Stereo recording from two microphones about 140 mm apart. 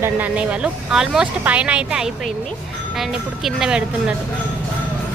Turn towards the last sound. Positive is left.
turn(degrees=-5)  # may be behind; listen again after turning